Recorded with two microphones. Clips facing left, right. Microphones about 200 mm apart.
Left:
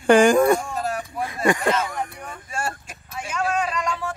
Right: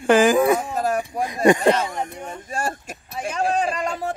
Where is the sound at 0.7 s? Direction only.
45° right (ahead or behind).